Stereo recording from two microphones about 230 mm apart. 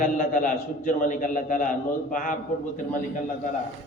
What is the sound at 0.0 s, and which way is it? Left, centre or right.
A man's voice, left.